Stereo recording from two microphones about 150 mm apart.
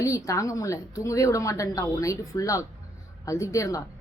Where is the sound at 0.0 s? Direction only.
20° left (ahead or behind).